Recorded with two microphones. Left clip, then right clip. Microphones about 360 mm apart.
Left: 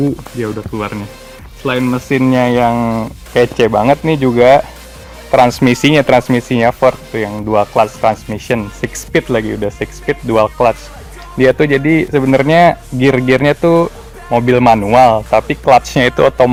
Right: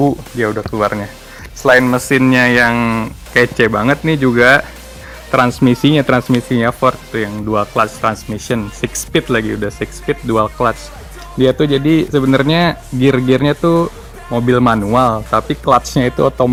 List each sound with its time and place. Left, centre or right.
0.4 s speech: centre; by 16.0 s left